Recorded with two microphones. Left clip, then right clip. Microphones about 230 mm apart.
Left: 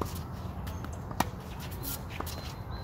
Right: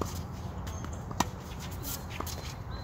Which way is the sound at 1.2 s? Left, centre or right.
Left.